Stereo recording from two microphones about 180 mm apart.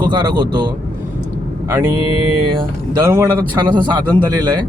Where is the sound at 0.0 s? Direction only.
25° right (ahead or behind).